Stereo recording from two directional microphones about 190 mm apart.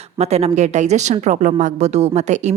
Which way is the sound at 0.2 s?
35° right (ahead or behind).